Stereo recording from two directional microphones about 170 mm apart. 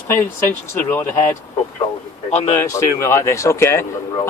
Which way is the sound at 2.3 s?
40° left (ahead or behind).